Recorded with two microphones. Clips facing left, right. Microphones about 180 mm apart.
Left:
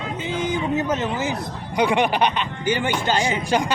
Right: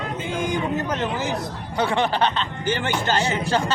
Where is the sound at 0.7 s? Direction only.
10° left (ahead or behind).